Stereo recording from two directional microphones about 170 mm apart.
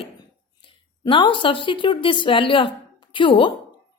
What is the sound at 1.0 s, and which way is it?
A woman's voice, 30° left (ahead or behind).